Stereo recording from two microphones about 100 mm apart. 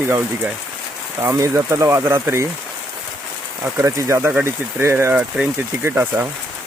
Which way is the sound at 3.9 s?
30° right (ahead or behind).